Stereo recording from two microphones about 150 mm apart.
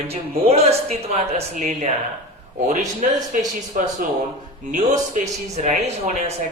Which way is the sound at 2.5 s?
60° right (ahead or behind).